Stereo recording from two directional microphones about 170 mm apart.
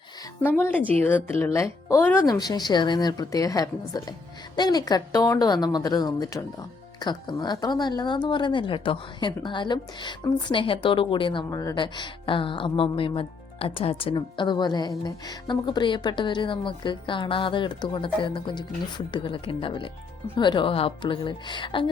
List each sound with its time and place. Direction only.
0.6 s speech: 10° left (ahead or behind); by 21.8 s 30° left (ahead or behind)